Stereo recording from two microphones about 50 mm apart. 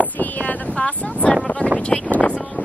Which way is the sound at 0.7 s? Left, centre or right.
Left.